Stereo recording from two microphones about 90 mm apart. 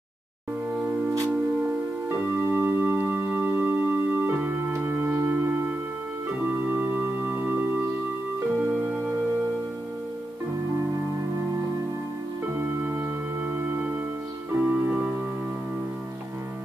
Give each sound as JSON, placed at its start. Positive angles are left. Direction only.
{"t": 2.0, "sound": "music", "side_deg": -25}
{"t": 12.5, "sound": "music", "side_deg": -25}